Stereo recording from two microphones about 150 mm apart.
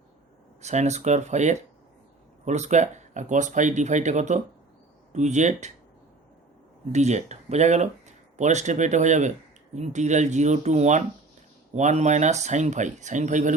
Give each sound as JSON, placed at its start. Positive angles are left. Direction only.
{"t": 0.6, "sound": "speech", "side_deg": -50}
{"t": 6.9, "sound": "speech", "side_deg": -50}